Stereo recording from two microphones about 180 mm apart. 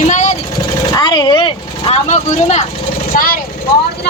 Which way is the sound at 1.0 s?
25° left (ahead or behind).